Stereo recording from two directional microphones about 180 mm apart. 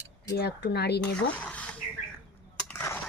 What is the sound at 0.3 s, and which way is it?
Cutlery, 65° left (ahead or behind).